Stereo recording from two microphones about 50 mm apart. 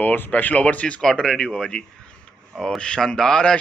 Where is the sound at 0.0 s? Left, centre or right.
Left.